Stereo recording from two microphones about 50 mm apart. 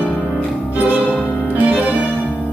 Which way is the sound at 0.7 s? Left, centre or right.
Right.